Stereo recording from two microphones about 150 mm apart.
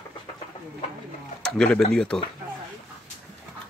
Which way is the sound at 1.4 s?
5° left (ahead or behind).